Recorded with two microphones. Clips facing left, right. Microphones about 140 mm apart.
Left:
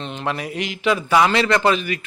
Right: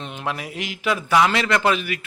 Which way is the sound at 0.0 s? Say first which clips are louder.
Left 3 dB; 10° right (ahead or behind).